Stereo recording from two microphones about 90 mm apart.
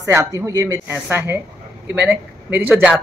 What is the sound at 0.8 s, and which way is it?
Speech, 20° right (ahead or behind).